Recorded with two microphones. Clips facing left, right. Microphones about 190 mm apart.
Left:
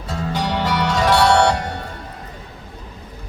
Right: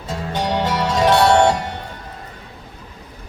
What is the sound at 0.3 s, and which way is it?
Music, 25° right (ahead or behind).